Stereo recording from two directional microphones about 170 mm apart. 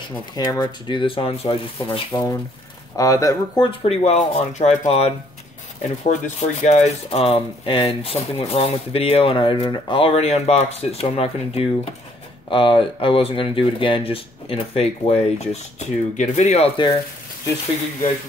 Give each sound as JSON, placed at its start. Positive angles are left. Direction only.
{"t": 0.4, "sound": "speech", "side_deg": 25}
{"t": 1.9, "sound": "speech", "side_deg": 20}
{"t": 3.8, "sound": "speech", "side_deg": 40}